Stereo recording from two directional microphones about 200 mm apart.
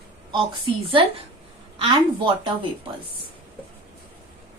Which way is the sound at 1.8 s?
25° right (ahead or behind).